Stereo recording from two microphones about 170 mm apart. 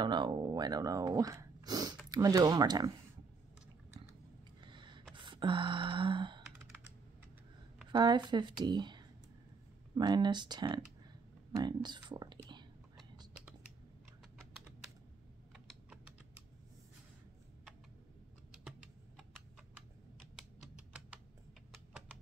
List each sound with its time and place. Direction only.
0.0 s speech: 25° right (ahead or behind)
4.6 s a sound: 30° right (ahead or behind)
5.1 s sigh: 30° right (ahead or behind)
7.9 s speech: 25° right (ahead or behind)
15.5 s typing: 5° right (ahead or behind)
20.2 s typing: 5° right (ahead or behind)